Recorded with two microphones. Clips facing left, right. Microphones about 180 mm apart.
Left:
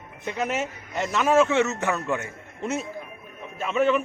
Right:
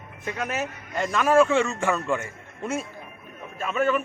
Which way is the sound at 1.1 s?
20° left (ahead or behind).